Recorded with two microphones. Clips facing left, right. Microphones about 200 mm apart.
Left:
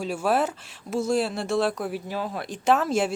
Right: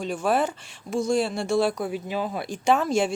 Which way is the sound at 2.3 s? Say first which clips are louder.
Even; centre (ahead or behind).